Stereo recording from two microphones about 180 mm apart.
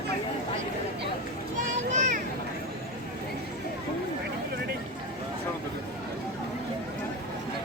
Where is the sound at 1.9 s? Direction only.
40° right (ahead or behind).